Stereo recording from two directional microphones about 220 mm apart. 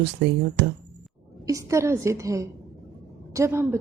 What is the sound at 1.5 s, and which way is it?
A woman's voice, 15° right (ahead or behind).